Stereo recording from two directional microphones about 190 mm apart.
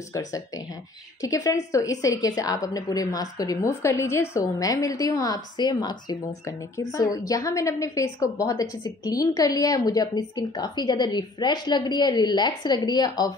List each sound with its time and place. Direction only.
0.1 s a woman's voice: 15° left (ahead or behind)